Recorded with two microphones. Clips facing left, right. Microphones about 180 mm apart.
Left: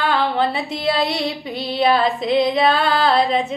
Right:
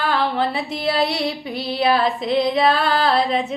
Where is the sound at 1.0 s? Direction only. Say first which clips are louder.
Even; 5° right (ahead or behind).